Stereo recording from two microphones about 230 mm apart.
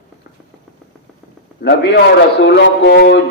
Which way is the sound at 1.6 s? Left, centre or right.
Left.